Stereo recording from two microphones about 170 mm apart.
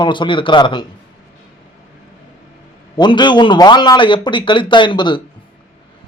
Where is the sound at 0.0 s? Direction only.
30° left (ahead or behind).